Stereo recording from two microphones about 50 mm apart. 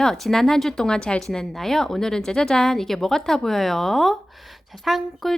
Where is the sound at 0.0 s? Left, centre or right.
Centre.